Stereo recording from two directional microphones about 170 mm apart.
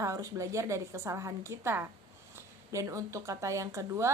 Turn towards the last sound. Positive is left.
turn(degrees=-15)  # may be behind; listen again after turning